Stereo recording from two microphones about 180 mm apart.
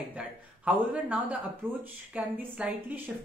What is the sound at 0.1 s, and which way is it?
Speech, 10° right (ahead or behind).